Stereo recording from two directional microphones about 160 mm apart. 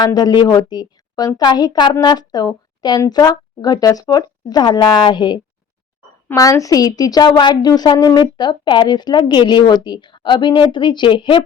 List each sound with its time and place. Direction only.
0.0 s speech: 25° left (ahead or behind)